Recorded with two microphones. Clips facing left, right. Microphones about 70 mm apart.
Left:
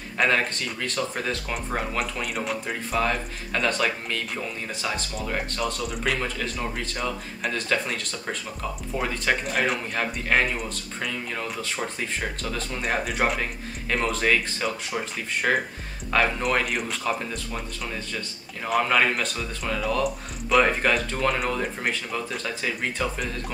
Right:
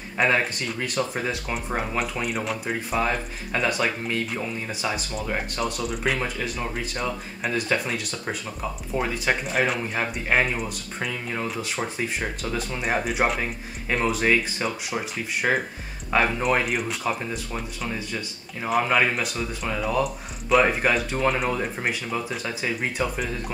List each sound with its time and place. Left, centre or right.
0.2 s speech: centre
1.5 s speech: centre
3.0 s speech: centre
8.9 s speech: centre
9.9 s speech: centre